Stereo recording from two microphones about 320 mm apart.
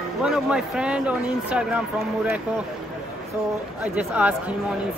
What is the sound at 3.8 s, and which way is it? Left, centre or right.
Speech, centre.